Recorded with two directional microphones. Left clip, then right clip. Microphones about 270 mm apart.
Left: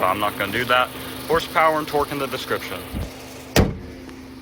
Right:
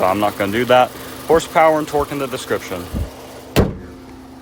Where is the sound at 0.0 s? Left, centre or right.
Centre.